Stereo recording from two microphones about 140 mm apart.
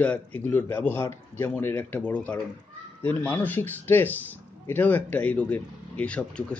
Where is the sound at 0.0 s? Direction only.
10° left (ahead or behind).